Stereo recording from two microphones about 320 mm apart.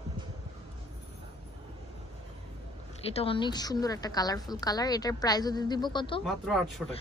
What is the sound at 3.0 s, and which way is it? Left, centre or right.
A woman's voice, centre.